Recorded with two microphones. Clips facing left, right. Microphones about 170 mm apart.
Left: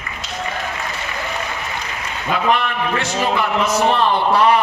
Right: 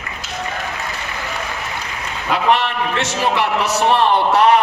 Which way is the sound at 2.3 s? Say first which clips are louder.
Right 2 dB; 75° right (ahead or behind).